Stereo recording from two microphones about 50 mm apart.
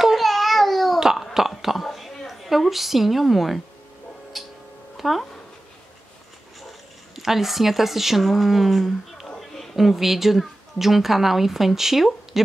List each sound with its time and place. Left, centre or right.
0.0 s babbling: centre
1.1 s a sound: centre
4.3 s tick-tock: centre
4.9 s music: centre
7.2 s a woman's voice: centre